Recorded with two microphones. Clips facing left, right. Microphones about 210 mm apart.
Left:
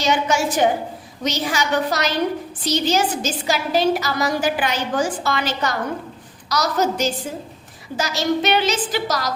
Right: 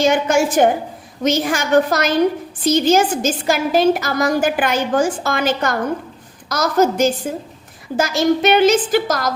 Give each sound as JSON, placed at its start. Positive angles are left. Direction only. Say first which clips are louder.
{"t": 0.0, "sound": "a woman's voice", "louder": "right 5 dB", "side_deg": -50}